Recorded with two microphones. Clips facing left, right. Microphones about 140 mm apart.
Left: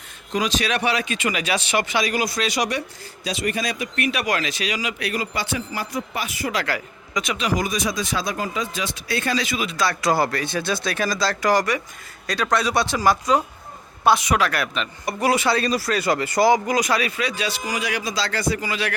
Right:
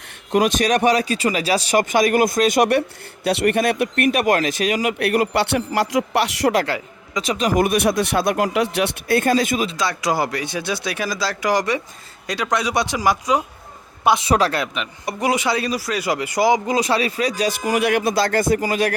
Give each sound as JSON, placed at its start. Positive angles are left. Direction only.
{"t": 0.3, "sound": "speech", "side_deg": -55}
{"t": 6.7, "sound": "a man's voice", "side_deg": -25}
{"t": 7.3, "sound": "speech", "side_deg": -45}
{"t": 9.7, "sound": "a man's voice", "side_deg": -15}
{"t": 14.3, "sound": "speech", "side_deg": -30}
{"t": 14.6, "sound": "a man's voice", "side_deg": -20}
{"t": 16.6, "sound": "speech", "side_deg": -30}